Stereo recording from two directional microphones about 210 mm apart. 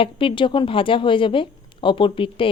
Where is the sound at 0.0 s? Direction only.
25° left (ahead or behind).